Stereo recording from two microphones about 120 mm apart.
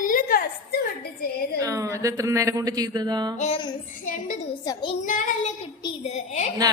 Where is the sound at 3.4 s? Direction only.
60° left (ahead or behind).